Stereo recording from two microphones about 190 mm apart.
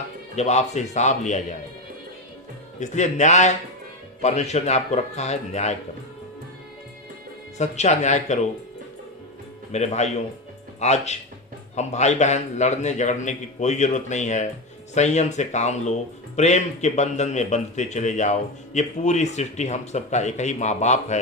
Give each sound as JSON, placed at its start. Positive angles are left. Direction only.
{"t": 0.3, "sound": "speech", "side_deg": 35}
{"t": 2.8, "sound": "speech", "side_deg": 40}
{"t": 7.6, "sound": "speech", "side_deg": 35}
{"t": 9.7, "sound": "speech", "side_deg": 35}